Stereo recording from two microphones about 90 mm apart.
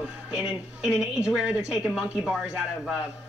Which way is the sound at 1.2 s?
5° right (ahead or behind).